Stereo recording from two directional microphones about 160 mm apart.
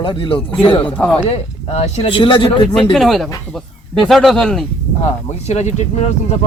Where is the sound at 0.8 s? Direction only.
10° left (ahead or behind).